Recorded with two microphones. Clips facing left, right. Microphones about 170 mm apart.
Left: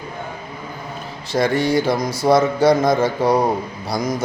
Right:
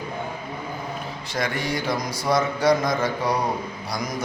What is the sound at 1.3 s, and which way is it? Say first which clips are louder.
Mantra: left 9 dB; 30° left (ahead or behind).